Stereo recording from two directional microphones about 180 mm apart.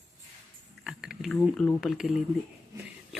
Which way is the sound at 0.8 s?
5° right (ahead or behind).